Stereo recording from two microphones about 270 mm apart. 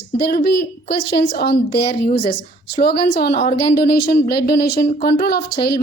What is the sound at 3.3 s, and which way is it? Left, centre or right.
Speech, left.